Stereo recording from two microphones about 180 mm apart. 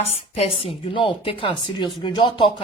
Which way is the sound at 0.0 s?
35° left (ahead or behind).